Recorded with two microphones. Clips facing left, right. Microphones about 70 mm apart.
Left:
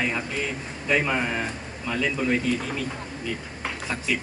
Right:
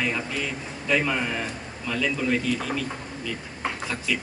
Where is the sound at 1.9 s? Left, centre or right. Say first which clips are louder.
Left 1 dB; left.